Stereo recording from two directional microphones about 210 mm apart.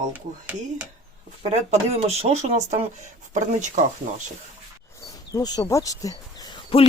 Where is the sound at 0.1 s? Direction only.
10° right (ahead or behind).